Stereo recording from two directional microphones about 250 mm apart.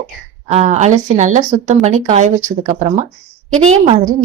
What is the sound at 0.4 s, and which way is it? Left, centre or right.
A woman's voice, right.